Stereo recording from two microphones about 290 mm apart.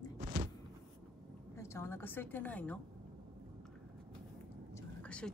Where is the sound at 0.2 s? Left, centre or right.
Right.